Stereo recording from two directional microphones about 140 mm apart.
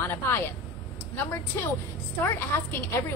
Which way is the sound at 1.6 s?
15° left (ahead or behind).